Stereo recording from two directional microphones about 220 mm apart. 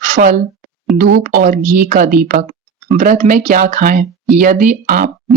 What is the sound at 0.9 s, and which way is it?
Speech, 45° right (ahead or behind).